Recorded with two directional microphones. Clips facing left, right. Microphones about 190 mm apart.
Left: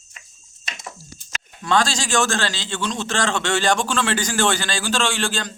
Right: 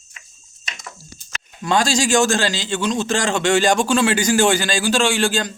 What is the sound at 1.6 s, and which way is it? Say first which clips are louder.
A man's voice: right 3 dB; 15° right (ahead or behind).